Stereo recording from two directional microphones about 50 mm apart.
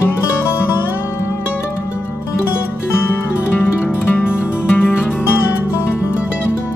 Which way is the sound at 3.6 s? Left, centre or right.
Left.